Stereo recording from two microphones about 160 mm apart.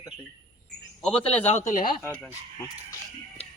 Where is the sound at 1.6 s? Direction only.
50° left (ahead or behind).